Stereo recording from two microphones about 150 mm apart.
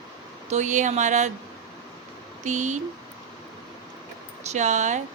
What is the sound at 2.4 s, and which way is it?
Speech, 55° right (ahead or behind).